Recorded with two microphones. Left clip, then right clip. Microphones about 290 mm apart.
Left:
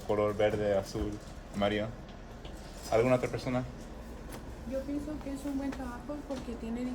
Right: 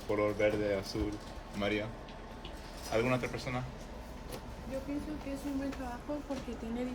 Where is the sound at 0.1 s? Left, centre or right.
Centre.